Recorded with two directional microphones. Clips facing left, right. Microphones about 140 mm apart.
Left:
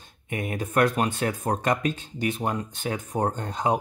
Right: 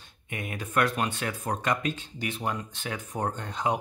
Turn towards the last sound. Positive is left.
turn(degrees=40)  # may be behind; listen again after turning